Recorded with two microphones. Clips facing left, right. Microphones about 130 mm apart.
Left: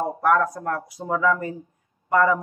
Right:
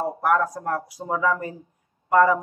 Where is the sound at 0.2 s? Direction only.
10° right (ahead or behind).